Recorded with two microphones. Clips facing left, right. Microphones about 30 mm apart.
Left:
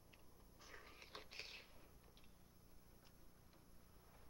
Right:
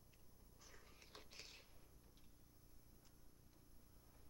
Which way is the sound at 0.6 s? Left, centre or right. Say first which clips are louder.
Left 6 dB; left.